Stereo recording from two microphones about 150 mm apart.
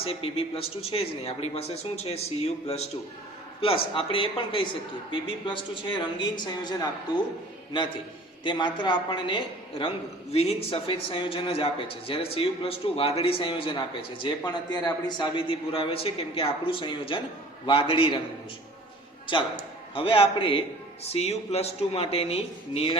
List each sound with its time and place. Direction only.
0.0 s speech: 40° left (ahead or behind)
3.9 s a man's voice: 35° left (ahead or behind)
8.4 s a man's voice: 30° left (ahead or behind)
19.3 s a man's voice: 30° left (ahead or behind)